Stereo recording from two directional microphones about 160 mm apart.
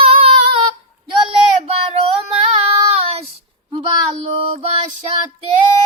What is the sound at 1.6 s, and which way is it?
Child singing, 40° right (ahead or behind).